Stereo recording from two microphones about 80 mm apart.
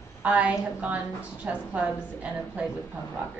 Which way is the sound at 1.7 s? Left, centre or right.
Centre.